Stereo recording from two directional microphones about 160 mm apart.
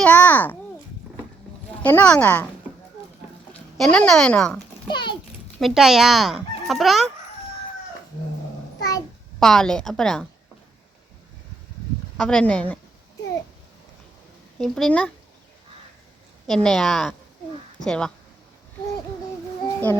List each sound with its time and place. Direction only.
0.0 s babbling: 10° left (ahead or behind)
1.8 s speech: 10° left (ahead or behind)
3.5 s speech: 5° left (ahead or behind)
4.9 s a child's voice: 30° left (ahead or behind)
5.5 s speech: centre (ahead or behind)
9.4 s speech: 5° left (ahead or behind)
12.1 s speech: 5° left (ahead or behind)
14.6 s speech: 5° left (ahead or behind)
16.5 s speech: 5° left (ahead or behind)
19.6 s child singing: 15° left (ahead or behind)